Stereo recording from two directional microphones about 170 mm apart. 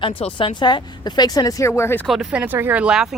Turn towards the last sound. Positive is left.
turn(degrees=-5)  # may be behind; listen again after turning